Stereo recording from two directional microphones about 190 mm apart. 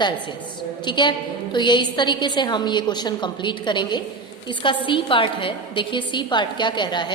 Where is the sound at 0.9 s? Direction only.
25° left (ahead or behind).